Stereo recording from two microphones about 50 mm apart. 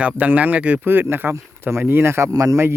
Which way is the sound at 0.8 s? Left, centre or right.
Right.